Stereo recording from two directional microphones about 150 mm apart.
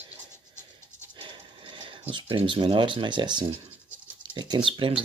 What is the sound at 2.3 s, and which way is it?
Speech, 35° right (ahead or behind).